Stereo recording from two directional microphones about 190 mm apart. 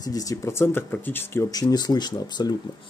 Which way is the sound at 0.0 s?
20° left (ahead or behind).